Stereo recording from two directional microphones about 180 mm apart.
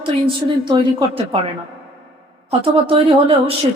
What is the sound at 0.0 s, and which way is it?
A woman's voice, 25° right (ahead or behind).